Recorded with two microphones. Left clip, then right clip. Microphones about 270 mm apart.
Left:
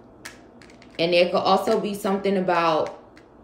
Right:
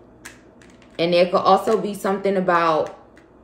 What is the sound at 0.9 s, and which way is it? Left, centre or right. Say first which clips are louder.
Speech: right 2 dB; centre.